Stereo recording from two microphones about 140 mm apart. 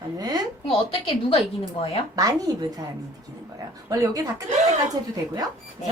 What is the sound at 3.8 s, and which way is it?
Speech, 25° right (ahead or behind).